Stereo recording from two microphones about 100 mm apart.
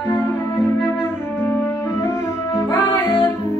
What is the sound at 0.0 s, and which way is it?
Music, 25° left (ahead or behind).